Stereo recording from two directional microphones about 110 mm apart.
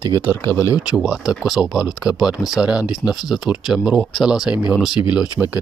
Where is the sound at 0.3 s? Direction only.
25° left (ahead or behind).